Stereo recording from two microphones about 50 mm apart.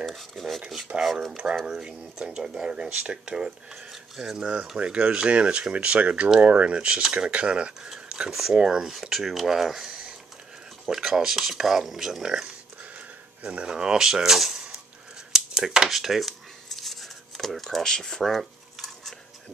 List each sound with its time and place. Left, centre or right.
0.0 s dishes: centre
0.6 s cutlery: centre
1.3 s speech: centre
7.9 s speech: centre
8.9 s cutlery: centre
9.8 s a sound: centre
10.9 s speech: centre
12.9 s a sound: right
13.7 s speech: centre
15.3 s a sound: centre
17.7 s speech: centre
18.2 s cutlery: centre